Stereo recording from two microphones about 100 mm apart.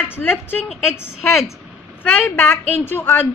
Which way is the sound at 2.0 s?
20° left (ahead or behind).